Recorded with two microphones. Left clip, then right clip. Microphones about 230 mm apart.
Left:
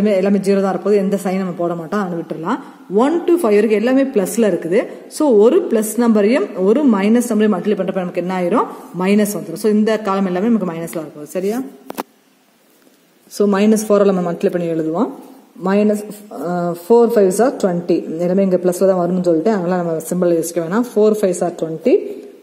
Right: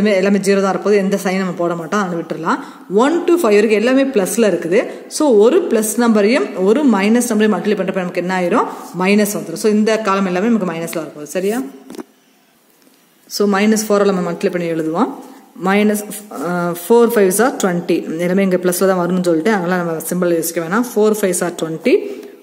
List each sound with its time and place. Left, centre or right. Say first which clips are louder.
0.0 s a man's voice: right 1 dB; centre
13.4 s a man's voice: even; centre
16.3 s a sound: right 1 dB; centre
16.7 s a man's voice: even; centre